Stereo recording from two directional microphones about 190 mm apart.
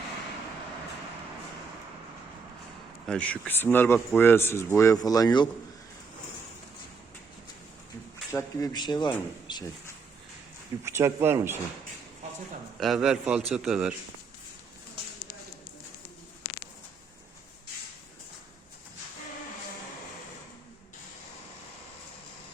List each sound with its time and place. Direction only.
3.1 s speech: 5° left (ahead or behind)
8.3 s speech: 15° left (ahead or behind)
10.8 s speech: 15° right (ahead or behind)
12.8 s a man's voice: centre (ahead or behind)